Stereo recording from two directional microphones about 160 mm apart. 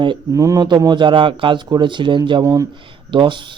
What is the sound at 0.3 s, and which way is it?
Speech, 20° right (ahead or behind).